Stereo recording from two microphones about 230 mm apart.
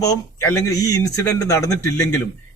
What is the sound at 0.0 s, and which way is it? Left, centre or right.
A man's voice, centre.